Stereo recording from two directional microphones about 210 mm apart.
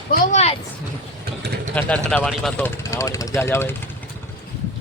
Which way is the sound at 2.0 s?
5° left (ahead or behind).